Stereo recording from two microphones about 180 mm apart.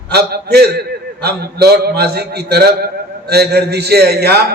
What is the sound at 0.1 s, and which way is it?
A man's voice, 65° right (ahead or behind).